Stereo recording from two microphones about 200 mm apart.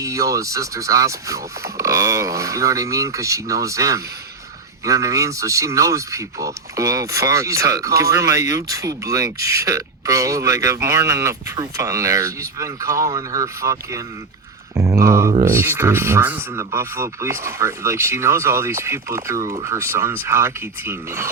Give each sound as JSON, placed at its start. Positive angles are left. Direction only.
{"t": 0.0, "sound": "speech", "side_deg": -15}
{"t": 14.8, "sound": "mantra", "side_deg": -15}
{"t": 15.4, "sound": "speech", "side_deg": -10}